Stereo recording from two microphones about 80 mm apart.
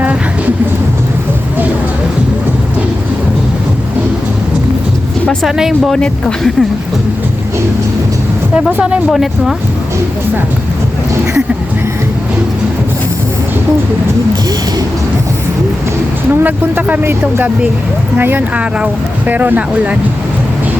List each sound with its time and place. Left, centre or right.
5.4 s speech: centre
8.5 s speech: centre
16.4 s speech: right